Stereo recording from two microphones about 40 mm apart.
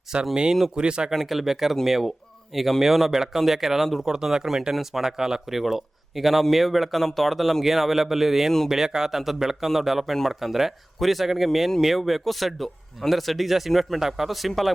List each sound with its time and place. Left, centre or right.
0.1 s speech: right
1.1 s a man's voice: centre